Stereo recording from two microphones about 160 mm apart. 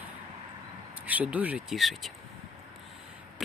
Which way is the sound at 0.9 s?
10° right (ahead or behind).